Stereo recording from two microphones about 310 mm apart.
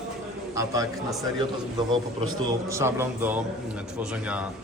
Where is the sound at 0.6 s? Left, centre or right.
Centre.